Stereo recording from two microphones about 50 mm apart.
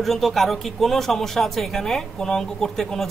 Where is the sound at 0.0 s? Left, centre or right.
Centre.